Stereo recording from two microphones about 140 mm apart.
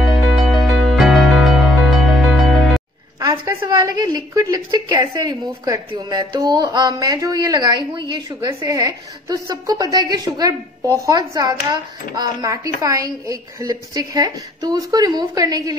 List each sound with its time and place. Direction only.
0.0 s music: centre (ahead or behind)
3.2 s a woman's voice: 25° right (ahead or behind)